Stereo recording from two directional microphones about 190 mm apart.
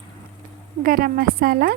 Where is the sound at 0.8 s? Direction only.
50° right (ahead or behind).